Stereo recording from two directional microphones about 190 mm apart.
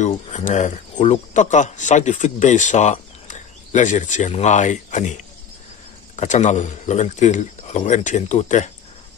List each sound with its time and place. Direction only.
0.0 s speech: 40° left (ahead or behind)